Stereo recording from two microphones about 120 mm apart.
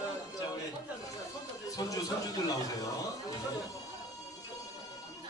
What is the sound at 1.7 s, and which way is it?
A man's voice, 30° left (ahead or behind).